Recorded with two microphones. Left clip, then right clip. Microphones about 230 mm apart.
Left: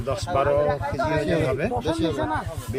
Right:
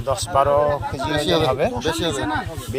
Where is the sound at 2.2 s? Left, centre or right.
Left.